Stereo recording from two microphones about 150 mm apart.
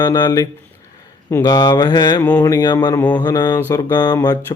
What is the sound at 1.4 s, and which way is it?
Speech, 25° left (ahead or behind).